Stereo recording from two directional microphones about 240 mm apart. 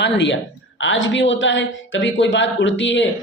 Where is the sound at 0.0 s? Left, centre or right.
Left.